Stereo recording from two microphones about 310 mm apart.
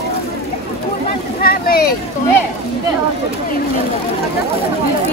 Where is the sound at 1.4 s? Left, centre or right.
Left.